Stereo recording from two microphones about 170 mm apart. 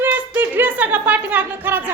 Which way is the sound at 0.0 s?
10° right (ahead or behind).